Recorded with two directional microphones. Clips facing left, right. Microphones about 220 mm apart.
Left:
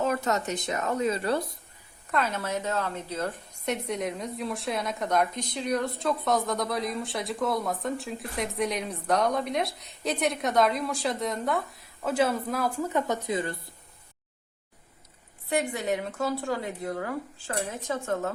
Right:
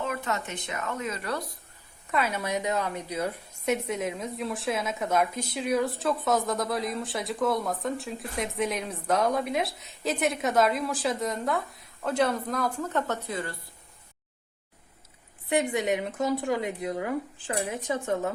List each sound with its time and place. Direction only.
0.0 s speech: 40° left (ahead or behind)
2.0 s a woman's voice: 10° right (ahead or behind); by 13.6 s 20° left (ahead or behind)
15.4 s a woman's voice: 20° right (ahead or behind)